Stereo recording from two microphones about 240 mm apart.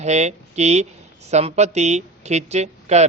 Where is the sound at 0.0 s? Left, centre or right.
Right.